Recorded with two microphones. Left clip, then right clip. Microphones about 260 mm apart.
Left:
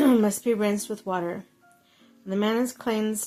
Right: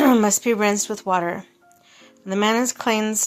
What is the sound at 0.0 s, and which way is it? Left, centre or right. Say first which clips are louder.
Speech: right 5 dB; centre.